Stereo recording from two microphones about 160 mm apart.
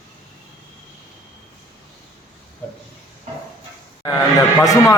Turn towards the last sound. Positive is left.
turn(degrees=20)  # may be behind; listen again after turning